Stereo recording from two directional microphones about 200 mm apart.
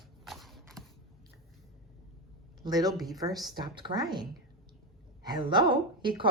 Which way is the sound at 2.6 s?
20° right (ahead or behind).